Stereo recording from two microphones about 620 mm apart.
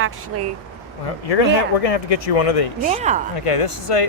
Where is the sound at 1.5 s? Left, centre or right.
Left.